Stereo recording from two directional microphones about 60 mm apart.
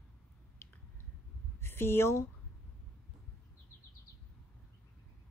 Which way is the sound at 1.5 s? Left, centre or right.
Left.